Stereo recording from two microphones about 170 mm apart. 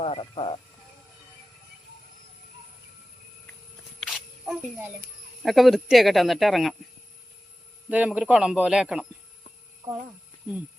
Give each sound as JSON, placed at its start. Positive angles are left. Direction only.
{"t": 0.0, "sound": "music", "side_deg": 35}
{"t": 4.0, "sound": "a sound", "side_deg": 0}
{"t": 5.4, "sound": "speech", "side_deg": 0}
{"t": 7.9, "sound": "speech", "side_deg": -10}